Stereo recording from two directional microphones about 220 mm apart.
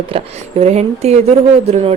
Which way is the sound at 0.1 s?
25° right (ahead or behind).